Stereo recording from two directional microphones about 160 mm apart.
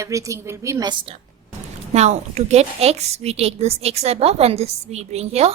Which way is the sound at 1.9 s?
45° right (ahead or behind).